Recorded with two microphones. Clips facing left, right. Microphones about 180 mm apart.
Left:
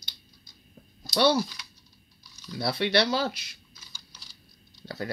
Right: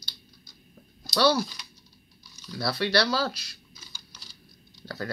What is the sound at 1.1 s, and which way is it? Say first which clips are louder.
Speech: even; 25° left (ahead or behind).